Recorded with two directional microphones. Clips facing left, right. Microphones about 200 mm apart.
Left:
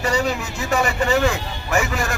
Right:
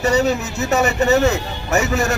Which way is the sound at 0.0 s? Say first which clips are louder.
Right 5 dB; 25° right (ahead or behind).